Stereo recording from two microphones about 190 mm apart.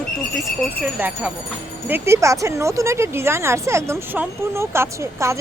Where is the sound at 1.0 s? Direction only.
10° right (ahead or behind).